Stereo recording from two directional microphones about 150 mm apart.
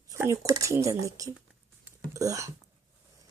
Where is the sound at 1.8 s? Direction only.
20° right (ahead or behind).